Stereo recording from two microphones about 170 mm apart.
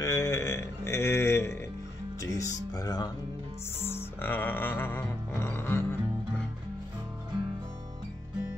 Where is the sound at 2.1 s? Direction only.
20° left (ahead or behind).